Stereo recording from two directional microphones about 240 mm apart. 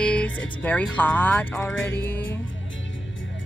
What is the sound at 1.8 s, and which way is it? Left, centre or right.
Speech, left.